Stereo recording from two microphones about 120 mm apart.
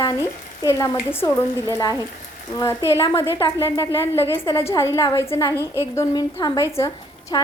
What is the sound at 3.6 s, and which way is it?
Frying, 25° left (ahead or behind).